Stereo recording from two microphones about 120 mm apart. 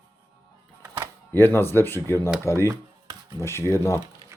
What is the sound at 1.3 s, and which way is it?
Speech, 20° left (ahead or behind).